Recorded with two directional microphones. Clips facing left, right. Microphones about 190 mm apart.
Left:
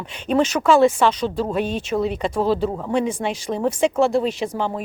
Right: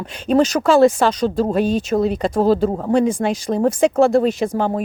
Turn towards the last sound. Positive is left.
turn(degrees=-45)  # may be behind; listen again after turning